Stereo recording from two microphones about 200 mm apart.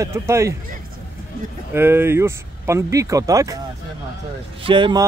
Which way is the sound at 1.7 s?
10° right (ahead or behind).